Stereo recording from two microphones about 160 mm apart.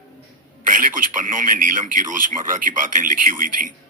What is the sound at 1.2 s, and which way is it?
Speech, 55° right (ahead or behind).